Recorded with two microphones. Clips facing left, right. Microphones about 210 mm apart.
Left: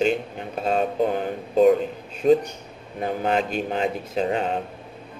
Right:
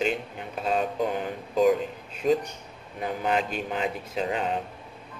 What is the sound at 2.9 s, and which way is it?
Speech, 35° left (ahead or behind).